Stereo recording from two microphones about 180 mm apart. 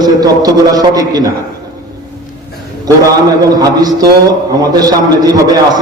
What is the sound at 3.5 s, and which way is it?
A man's voice, 20° right (ahead or behind).